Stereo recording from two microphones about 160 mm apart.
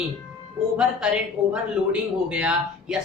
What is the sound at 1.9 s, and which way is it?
A woman's voice, 5° right (ahead or behind).